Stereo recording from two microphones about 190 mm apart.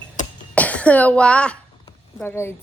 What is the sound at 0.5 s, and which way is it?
A woman's voice, 5° left (ahead or behind).